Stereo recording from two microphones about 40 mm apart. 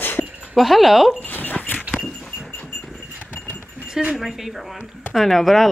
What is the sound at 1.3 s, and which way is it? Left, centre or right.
Speech, left.